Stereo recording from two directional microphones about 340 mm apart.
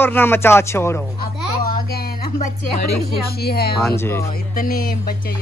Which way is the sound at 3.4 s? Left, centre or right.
Left.